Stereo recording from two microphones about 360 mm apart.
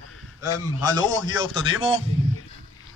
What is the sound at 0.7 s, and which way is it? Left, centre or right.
Speech, centre.